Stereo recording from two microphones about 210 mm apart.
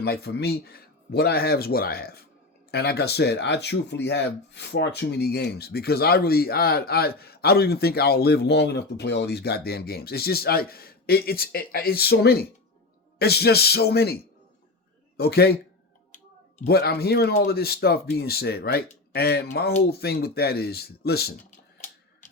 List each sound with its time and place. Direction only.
0.0 s speech: 50° left (ahead or behind)
15.2 s speech: 50° left (ahead or behind)
16.6 s speech: 50° left (ahead or behind)
21.5 s typewriter: 35° left (ahead or behind)